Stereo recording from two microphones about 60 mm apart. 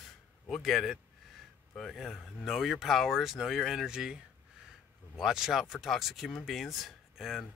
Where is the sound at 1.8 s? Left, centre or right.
Centre.